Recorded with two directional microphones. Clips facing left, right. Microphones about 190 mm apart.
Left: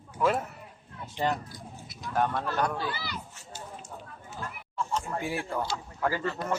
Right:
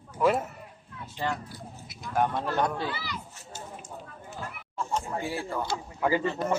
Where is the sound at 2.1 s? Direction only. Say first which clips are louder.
Right 1 dB; 15° right (ahead or behind).